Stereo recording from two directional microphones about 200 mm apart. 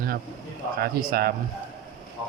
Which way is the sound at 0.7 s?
50° right (ahead or behind).